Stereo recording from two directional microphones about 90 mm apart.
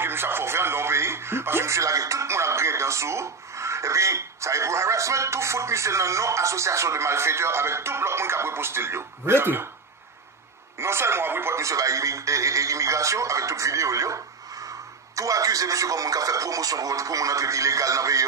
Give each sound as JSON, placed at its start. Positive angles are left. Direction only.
{"t": 0.0, "sound": "speech", "side_deg": -25}
{"t": 10.8, "sound": "a man's voice", "side_deg": -30}